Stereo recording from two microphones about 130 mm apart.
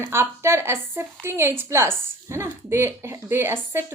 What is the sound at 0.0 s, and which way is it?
A woman's voice, 20° right (ahead or behind).